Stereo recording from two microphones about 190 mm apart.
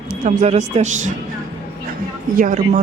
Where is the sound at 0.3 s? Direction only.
40° right (ahead or behind).